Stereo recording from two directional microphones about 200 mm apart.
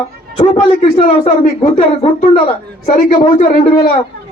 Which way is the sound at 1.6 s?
30° left (ahead or behind).